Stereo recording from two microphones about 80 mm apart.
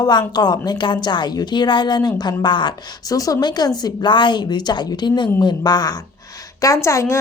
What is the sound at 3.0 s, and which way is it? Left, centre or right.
A woman's voice, left.